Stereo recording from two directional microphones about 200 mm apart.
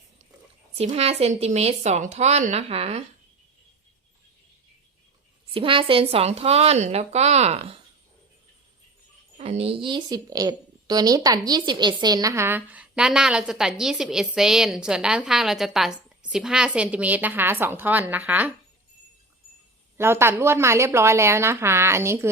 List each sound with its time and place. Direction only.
0.8 s a woman's voice: 30° right (ahead or behind)
5.5 s a woman's voice: 25° right (ahead or behind)
9.4 s a woman's voice: 30° right (ahead or behind); by 18.5 s 10° right (ahead or behind)
20.0 s a woman's voice: 10° right (ahead or behind)